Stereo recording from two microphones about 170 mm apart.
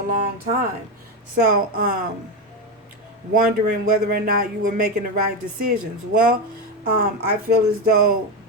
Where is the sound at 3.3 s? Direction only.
55° right (ahead or behind).